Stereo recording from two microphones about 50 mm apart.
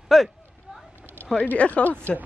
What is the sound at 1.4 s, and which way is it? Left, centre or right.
Speech, left.